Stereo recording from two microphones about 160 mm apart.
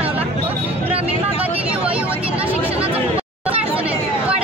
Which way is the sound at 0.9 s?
40° right (ahead or behind).